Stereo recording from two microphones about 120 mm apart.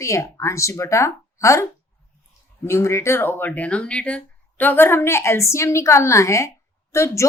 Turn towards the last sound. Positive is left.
turn(degrees=25)  # may be behind; listen again after turning